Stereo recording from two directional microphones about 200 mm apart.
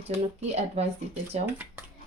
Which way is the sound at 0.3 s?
30° right (ahead or behind).